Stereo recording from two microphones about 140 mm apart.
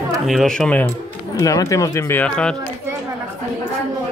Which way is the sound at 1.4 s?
25° left (ahead or behind).